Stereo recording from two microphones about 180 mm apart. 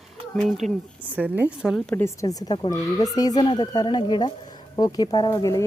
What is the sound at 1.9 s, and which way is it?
Speech, 15° left (ahead or behind).